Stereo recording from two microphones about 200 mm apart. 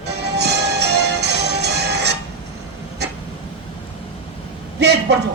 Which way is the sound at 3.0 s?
55° right (ahead or behind).